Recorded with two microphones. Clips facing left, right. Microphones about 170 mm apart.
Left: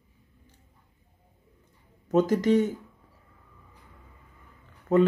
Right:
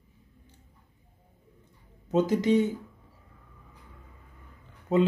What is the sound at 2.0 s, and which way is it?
Speech, 15° right (ahead or behind).